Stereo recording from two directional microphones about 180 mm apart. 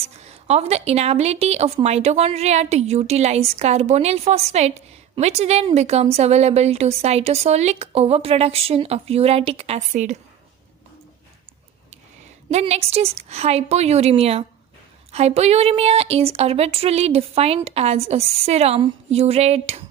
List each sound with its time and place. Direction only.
0.2 s speech: 35° right (ahead or behind)
12.5 s speech: 35° right (ahead or behind)